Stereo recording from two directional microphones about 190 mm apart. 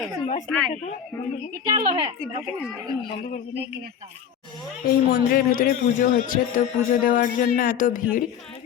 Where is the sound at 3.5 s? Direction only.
60° right (ahead or behind).